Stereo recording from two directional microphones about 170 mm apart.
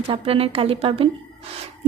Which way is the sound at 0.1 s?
35° right (ahead or behind).